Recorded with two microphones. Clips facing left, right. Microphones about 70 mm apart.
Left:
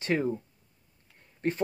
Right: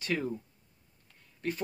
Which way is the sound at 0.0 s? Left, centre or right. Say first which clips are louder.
Left 5 dB; left.